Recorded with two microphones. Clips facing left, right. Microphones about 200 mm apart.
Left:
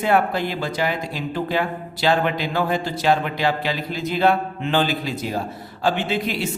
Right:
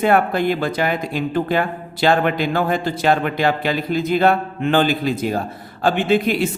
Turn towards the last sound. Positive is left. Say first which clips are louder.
# right 7 dB
turn(degrees=-50)  # may be behind; listen again after turning